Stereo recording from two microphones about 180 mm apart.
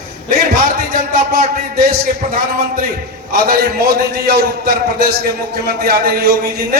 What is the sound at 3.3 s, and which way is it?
A man's voice, 55° right (ahead or behind).